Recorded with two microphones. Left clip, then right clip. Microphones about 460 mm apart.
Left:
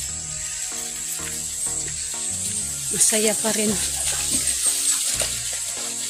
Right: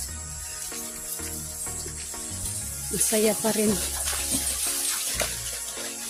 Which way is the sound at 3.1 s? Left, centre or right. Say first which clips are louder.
Even; right.